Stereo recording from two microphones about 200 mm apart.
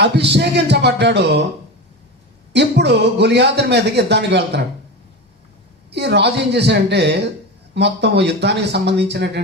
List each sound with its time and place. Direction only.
0.0 s a man's voice: 55° right (ahead or behind)
2.5 s a man's voice: 60° right (ahead or behind)
5.9 s a man's voice: 60° right (ahead or behind)